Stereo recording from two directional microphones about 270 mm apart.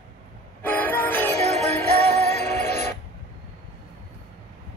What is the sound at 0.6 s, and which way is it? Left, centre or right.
Music, centre.